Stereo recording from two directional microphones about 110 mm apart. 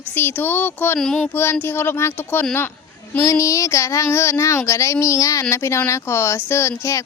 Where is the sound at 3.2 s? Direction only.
30° left (ahead or behind).